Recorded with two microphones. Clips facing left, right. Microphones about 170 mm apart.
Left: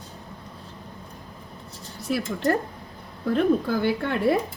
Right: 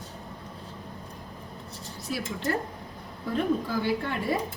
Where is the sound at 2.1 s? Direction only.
60° left (ahead or behind).